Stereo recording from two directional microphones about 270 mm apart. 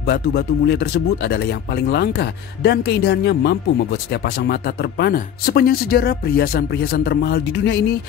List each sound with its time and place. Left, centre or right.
0.0 s speech: left